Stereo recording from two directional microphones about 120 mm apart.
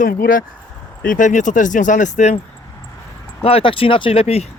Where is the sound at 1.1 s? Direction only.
90° left.